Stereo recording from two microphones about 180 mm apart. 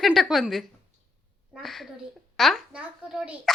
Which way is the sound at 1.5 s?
Centre (ahead or behind).